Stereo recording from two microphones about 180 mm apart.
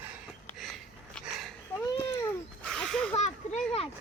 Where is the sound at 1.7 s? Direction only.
15° left (ahead or behind).